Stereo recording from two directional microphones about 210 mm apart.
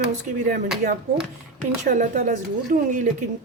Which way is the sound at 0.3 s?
40° right (ahead or behind).